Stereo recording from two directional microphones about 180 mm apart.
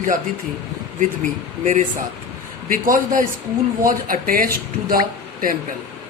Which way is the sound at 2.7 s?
50° right (ahead or behind).